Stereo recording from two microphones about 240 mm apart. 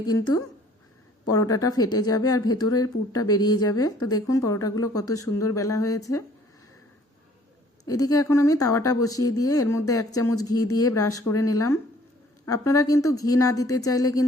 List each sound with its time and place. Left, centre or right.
0.0 s a woman's voice: centre
7.9 s a woman's voice: centre